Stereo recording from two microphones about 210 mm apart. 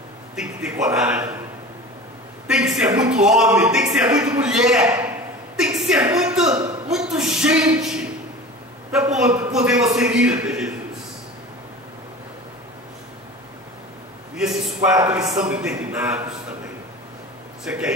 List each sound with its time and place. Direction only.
0.4 s a man's voice: 5° right (ahead or behind)
2.4 s a sound: 5° right (ahead or behind)
3.1 s a man's voice: 5° right (ahead or behind)
6.5 s a man's voice: 15° right (ahead or behind)
6.9 s a man's voice: centre (ahead or behind)
14.3 s a sound: 5° right (ahead or behind)
15.0 s a man's voice: 10° right (ahead or behind)
17.6 s a man's voice: 5° right (ahead or behind)